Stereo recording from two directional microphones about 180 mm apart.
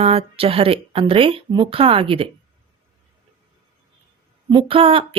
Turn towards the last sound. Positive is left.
turn(degrees=-30)  # may be behind; listen again after turning